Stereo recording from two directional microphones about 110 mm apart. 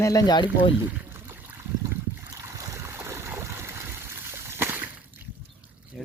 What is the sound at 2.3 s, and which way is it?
Boat, 30° right (ahead or behind).